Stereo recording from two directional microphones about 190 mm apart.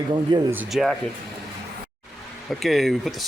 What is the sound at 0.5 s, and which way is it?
Speech, 5° right (ahead or behind).